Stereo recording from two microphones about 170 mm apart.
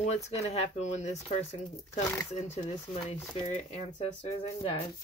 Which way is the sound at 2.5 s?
40° left (ahead or behind).